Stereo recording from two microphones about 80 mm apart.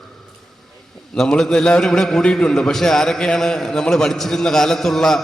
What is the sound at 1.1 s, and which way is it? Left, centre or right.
A man's voice, centre.